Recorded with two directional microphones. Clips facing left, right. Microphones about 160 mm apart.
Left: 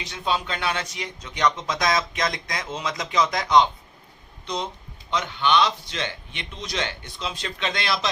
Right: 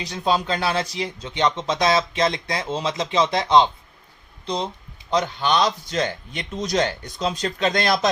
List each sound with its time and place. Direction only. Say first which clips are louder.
0.0 s speech: right 4 dB; 35° right (ahead or behind)